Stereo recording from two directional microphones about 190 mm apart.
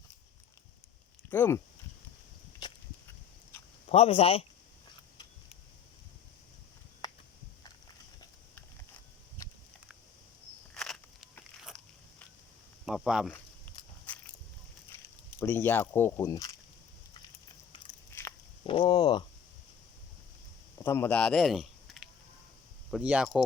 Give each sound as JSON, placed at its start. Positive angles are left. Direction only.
{"t": 1.3, "sound": "speech", "side_deg": 10}
{"t": 3.8, "sound": "speech", "side_deg": 30}
{"t": 10.8, "sound": "crunch", "side_deg": 0}
{"t": 12.8, "sound": "a sound", "side_deg": 0}
{"t": 13.8, "sound": "walk", "side_deg": 25}
{"t": 15.4, "sound": "speech", "side_deg": 10}
{"t": 18.1, "sound": "biting", "side_deg": 15}
{"t": 18.6, "sound": "speech", "side_deg": 25}
{"t": 20.8, "sound": "speech", "side_deg": 10}